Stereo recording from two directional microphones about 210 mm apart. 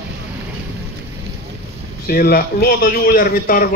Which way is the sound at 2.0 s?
45° left (ahead or behind).